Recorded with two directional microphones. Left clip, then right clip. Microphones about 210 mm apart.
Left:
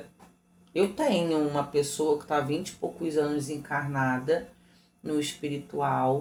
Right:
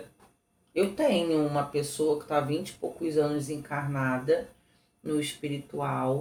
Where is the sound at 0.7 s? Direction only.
30° left (ahead or behind).